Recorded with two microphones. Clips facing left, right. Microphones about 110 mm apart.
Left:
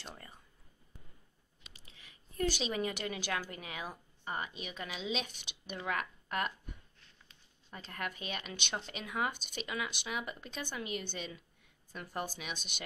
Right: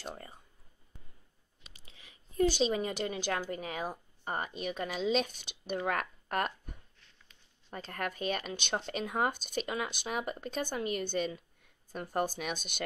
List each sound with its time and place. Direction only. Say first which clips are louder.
0.0 s a sound: right 6 dB; 35° right (ahead or behind)
1.6 s chewing: right 1 dB; 25° right (ahead or behind)
2.6 s a woman's voice: right 5 dB; 30° right (ahead or behind)
7.7 s speech: right 4 dB; 45° right (ahead or behind)